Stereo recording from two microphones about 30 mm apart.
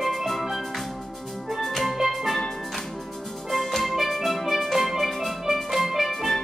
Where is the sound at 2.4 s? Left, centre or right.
Centre.